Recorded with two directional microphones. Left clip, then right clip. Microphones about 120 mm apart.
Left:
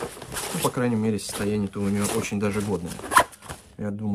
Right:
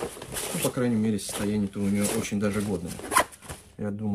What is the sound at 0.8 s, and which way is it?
Speech, 65° left (ahead or behind).